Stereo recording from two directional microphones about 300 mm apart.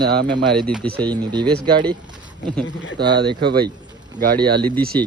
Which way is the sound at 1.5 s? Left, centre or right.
Centre.